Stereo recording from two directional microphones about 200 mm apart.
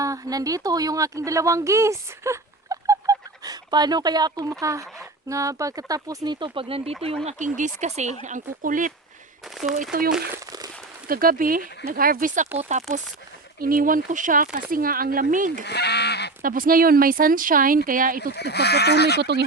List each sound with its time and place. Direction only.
0.0 s speech: 15° right (ahead or behind); by 8.9 s 40° right (ahead or behind)
9.4 s speech: centre (ahead or behind)
10.3 s a sound: 15° right (ahead or behind)
11.1 s speech: 45° right (ahead or behind)
15.6 s goose: 55° left (ahead or behind)
16.4 s speech: 45° right (ahead or behind)
18.3 s speech: 55° left (ahead or behind)